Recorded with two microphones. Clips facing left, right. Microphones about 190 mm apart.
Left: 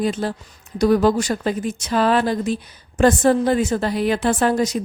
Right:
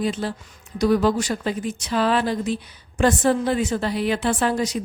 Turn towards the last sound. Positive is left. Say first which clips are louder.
# left 4 dB
turn(degrees=45)  # may be behind; listen again after turning